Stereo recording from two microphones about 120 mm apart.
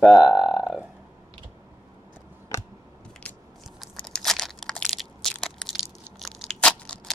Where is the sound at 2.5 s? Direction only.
20° left (ahead or behind).